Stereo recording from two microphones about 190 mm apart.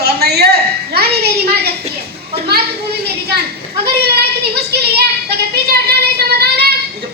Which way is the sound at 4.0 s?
55° right (ahead or behind).